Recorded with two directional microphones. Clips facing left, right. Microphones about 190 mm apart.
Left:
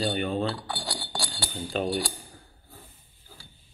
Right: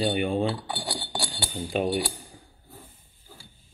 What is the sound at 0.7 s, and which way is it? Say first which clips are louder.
Speech: right 2 dB; 20° right (ahead or behind).